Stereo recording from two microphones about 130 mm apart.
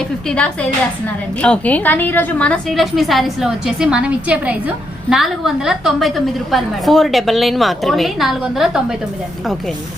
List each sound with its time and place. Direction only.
0.3 s a woman's voice: 10° left (ahead or behind)